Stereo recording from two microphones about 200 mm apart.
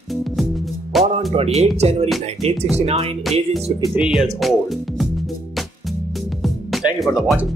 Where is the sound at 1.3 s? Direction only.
30° right (ahead or behind).